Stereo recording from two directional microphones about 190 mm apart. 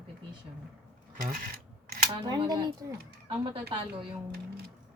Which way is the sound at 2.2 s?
20° right (ahead or behind).